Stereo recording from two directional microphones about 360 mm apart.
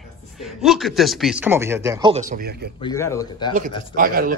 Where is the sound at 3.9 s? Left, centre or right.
Right.